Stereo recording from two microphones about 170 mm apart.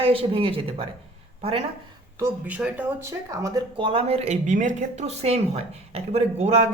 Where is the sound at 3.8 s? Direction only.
30° right (ahead or behind).